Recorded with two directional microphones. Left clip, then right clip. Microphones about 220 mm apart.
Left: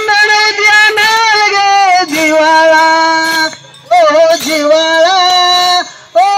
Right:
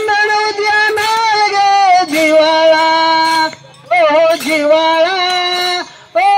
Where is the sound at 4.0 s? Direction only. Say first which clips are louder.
Left 3 dB; 55° right (ahead or behind).